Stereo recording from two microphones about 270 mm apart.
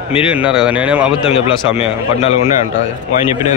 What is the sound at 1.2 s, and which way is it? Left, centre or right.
A man's voice, left.